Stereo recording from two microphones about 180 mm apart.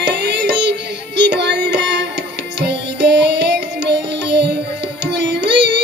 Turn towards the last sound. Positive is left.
turn(degrees=-75)  # may be behind; listen again after turning